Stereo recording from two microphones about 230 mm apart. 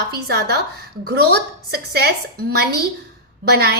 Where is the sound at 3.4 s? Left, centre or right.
Right.